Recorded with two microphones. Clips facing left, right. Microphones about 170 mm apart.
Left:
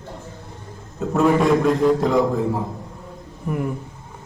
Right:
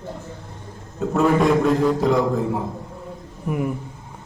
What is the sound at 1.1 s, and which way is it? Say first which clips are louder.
A man's voice: left 1 dB; centre (ahead or behind).